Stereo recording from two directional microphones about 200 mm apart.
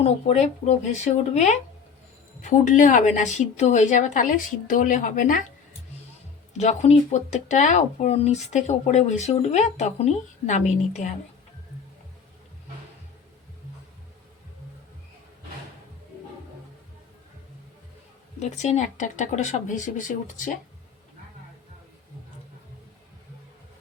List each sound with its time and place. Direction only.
0.0 s speech: 30° left (ahead or behind)
6.6 s speech: 35° left (ahead or behind)
18.3 s speech: 35° left (ahead or behind)